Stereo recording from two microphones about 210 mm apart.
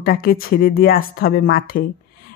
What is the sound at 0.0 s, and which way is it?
Speech, 45° left (ahead or behind).